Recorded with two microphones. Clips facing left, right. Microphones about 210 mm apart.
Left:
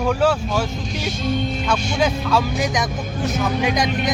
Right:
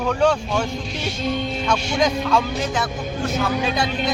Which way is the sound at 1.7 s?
5° left (ahead or behind).